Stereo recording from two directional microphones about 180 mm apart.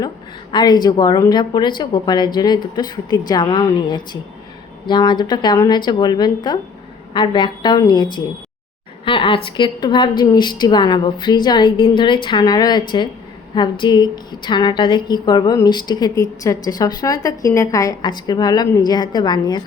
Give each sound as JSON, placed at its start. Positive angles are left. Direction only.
{"t": 0.5, "sound": "a woman's voice", "side_deg": 25}